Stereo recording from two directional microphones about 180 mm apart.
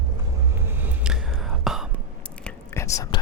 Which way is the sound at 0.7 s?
10° right (ahead or behind).